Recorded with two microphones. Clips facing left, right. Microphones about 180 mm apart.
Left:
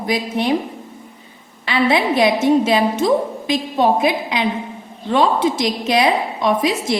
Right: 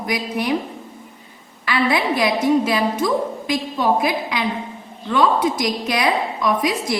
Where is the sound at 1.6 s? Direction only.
25° left (ahead or behind).